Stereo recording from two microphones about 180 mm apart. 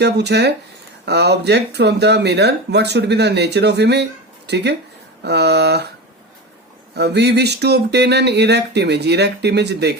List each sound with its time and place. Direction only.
0.0 s speech: 65° right (ahead or behind)
6.9 s speech: 65° right (ahead or behind)